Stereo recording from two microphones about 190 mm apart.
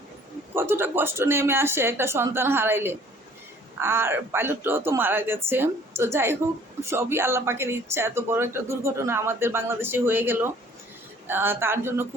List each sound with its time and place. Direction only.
0.5 s speech: 10° right (ahead or behind)